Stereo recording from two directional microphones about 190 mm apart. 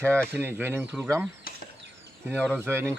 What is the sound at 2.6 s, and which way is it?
Speech, 15° right (ahead or behind).